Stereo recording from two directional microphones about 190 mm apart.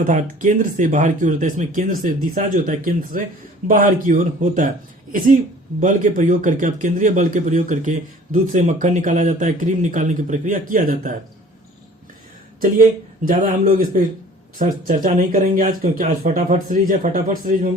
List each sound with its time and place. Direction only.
0.0 s a man's voice: 45° right (ahead or behind)
5.8 s a man's voice: 40° right (ahead or behind)
13.2 s a man's voice: 45° right (ahead or behind)